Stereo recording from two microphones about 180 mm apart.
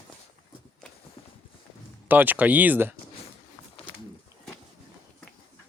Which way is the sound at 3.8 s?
30° left (ahead or behind).